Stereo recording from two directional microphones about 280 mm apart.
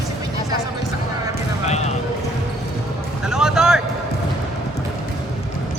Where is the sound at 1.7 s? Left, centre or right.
Left.